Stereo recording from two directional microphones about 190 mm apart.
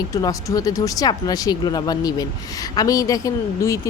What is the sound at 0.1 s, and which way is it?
Speech, 20° left (ahead or behind).